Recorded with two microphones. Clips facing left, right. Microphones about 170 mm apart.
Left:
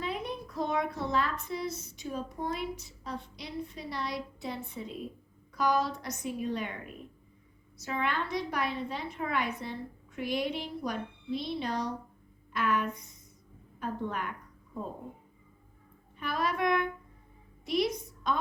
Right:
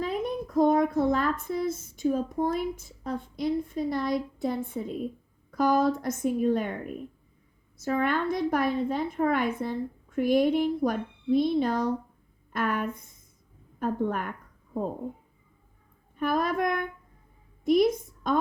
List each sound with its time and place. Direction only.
0.0 s a child's voice: 45° right (ahead or behind)
16.1 s a child's voice: 50° right (ahead or behind)